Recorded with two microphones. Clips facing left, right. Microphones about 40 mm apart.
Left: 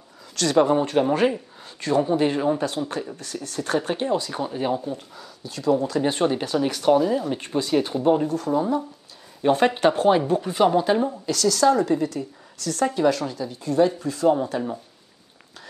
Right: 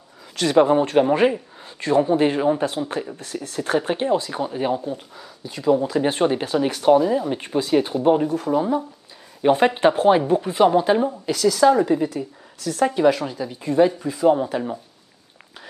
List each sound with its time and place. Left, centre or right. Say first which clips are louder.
0.4 s speech: right 3 dB; centre